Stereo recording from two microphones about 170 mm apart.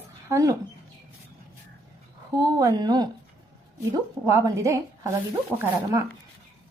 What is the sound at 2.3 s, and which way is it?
Speech, 20° right (ahead or behind).